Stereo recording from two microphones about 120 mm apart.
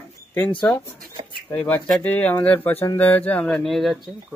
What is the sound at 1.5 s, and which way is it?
Speech, 15° left (ahead or behind).